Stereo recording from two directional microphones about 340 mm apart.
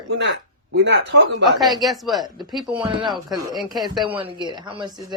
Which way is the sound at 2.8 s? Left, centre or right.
Centre.